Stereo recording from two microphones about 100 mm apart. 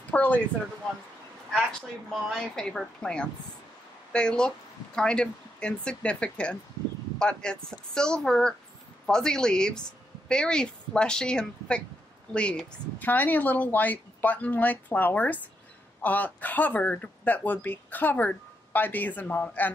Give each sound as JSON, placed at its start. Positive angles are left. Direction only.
{"t": 0.1, "sound": "speech", "side_deg": 15}
{"t": 1.5, "sound": "a woman's voice", "side_deg": 5}